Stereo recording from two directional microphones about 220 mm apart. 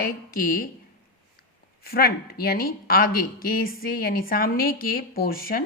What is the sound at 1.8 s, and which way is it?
Speech, 45° left (ahead or behind).